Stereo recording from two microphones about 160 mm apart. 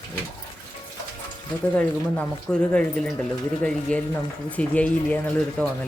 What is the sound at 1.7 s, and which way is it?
Speech, 5° left (ahead or behind).